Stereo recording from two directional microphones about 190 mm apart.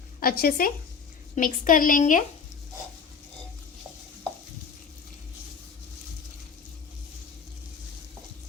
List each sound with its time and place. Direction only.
0.2 s a woman's voice: 50° left (ahead or behind)